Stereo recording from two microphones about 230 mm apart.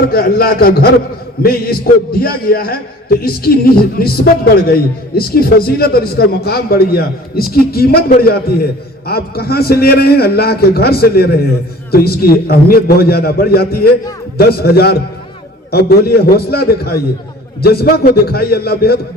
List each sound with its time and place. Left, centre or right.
0.1 s a man's voice: left